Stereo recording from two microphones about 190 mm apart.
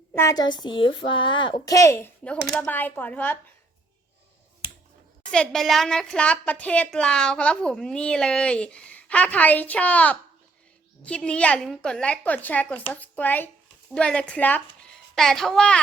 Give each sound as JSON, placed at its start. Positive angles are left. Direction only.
{"t": 0.1, "sound": "a woman's voice", "side_deg": 15}
{"t": 5.3, "sound": "a woman's voice", "side_deg": 5}